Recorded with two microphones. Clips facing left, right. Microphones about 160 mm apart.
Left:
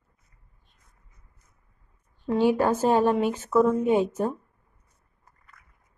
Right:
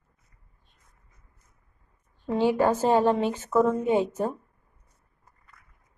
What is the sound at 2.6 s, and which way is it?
Speech, 15° right (ahead or behind).